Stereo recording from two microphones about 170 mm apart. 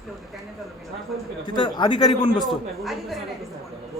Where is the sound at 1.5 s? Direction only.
25° left (ahead or behind).